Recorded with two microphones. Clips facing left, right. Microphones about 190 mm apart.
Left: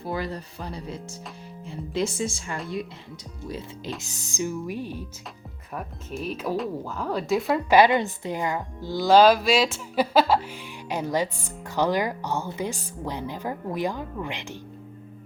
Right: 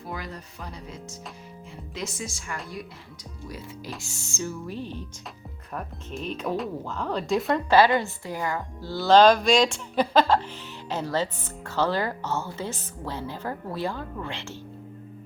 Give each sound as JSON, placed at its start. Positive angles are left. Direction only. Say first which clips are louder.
{"t": 0.0, "sound": "speech", "louder": "left 6 dB", "side_deg": 30}
{"t": 4.0, "sound": "speech", "louder": "left 3 dB", "side_deg": 15}
{"t": 7.7, "sound": "speech", "louder": "left 1 dB", "side_deg": 15}